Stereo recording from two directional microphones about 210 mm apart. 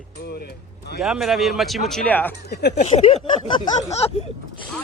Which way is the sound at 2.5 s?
50° left (ahead or behind).